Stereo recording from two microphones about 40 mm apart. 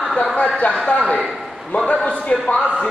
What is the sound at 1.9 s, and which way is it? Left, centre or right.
Speech, left.